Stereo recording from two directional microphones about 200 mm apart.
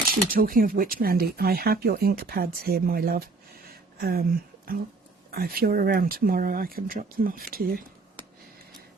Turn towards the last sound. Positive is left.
turn(degrees=-45)  # may be behind; listen again after turning